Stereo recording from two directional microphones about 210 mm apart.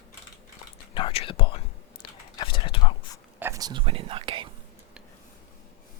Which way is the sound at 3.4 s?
15° right (ahead or behind).